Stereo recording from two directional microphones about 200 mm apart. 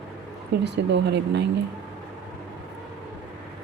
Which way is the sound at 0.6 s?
60° right (ahead or behind).